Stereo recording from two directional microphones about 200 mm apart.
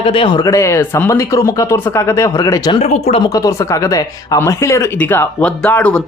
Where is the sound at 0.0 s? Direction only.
25° left (ahead or behind).